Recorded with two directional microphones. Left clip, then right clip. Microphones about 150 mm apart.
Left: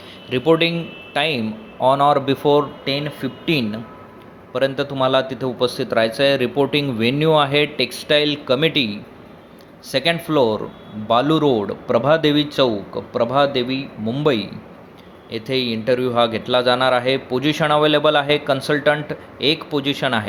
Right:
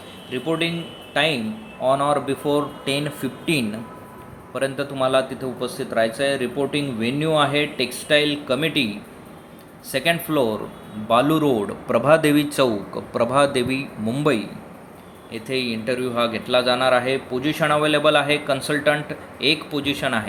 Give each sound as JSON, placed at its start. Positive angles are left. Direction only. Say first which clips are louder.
{"t": 0.3, "sound": "speech", "louder": "left 7 dB", "side_deg": 40}
{"t": 2.8, "sound": "a man's voice", "louder": "left 1 dB", "side_deg": 10}
{"t": 14.3, "sound": "a man's voice", "louder": "left 3 dB", "side_deg": 25}